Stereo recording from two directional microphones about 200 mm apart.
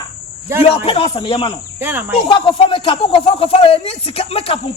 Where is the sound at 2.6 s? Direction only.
25° left (ahead or behind).